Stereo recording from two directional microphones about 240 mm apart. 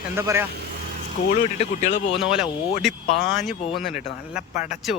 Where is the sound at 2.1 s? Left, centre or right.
Centre.